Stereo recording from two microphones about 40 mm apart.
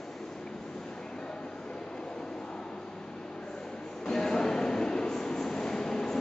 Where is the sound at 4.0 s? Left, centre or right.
Centre.